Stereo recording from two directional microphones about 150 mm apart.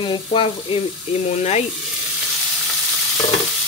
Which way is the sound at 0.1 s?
35° left (ahead or behind).